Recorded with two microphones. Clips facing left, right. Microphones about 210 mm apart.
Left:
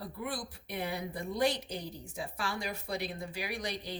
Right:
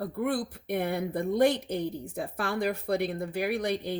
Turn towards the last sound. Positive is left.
turn(degrees=-55)  # may be behind; listen again after turning